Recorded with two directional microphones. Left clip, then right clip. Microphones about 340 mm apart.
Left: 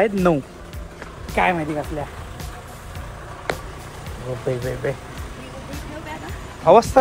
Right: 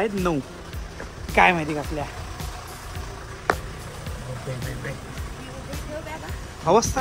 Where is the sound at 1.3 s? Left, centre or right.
Centre.